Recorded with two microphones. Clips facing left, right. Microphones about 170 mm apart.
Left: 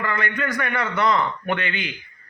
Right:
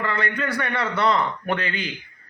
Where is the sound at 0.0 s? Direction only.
30° right (ahead or behind).